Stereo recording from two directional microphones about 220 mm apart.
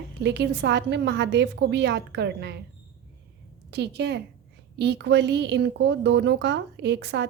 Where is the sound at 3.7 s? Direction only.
50° right (ahead or behind).